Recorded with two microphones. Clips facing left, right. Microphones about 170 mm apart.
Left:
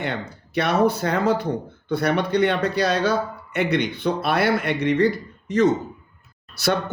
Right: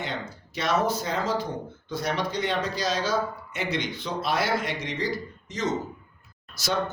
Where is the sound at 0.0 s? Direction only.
60° left (ahead or behind).